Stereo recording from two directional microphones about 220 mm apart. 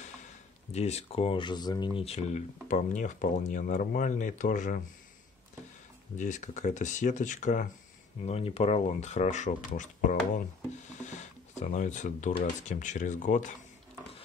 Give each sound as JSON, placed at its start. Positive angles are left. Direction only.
{"t": 0.7, "sound": "speech", "side_deg": 30}
{"t": 6.1, "sound": "speech", "side_deg": 35}